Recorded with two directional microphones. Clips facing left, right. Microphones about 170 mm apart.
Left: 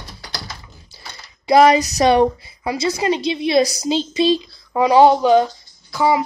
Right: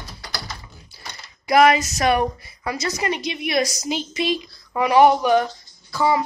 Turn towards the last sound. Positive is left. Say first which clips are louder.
# left 3 dB
turn(degrees=15)  # may be behind; listen again after turning